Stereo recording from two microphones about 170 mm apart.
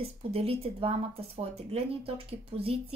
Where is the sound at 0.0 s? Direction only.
35° right (ahead or behind).